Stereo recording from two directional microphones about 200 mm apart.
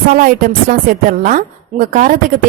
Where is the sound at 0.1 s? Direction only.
45° right (ahead or behind).